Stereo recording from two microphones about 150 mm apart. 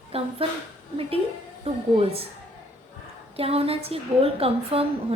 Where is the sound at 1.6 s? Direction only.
40° right (ahead or behind).